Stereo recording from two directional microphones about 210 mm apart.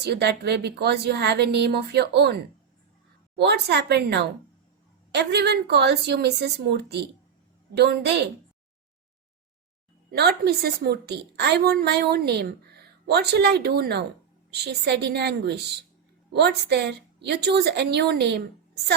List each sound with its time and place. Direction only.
0.0 s a woman's voice: 50° right (ahead or behind)
10.1 s a woman's voice: 50° right (ahead or behind)